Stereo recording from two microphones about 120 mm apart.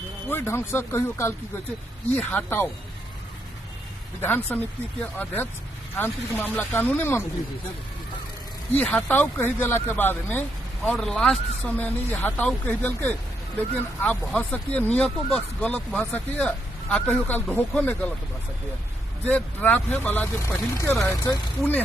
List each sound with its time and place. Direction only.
0.3 s speech: 20° left (ahead or behind)
4.2 s speech: 20° left (ahead or behind)
8.7 s speech: 10° left (ahead or behind)
19.2 s speech: 15° left (ahead or behind)